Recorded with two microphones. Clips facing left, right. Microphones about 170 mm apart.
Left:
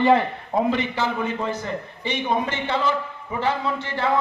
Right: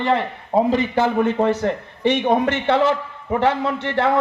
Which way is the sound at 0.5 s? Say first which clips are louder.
Right 4 dB; 30° right (ahead or behind).